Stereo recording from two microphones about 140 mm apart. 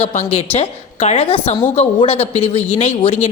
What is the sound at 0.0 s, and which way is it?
A woman's voice, 50° left (ahead or behind).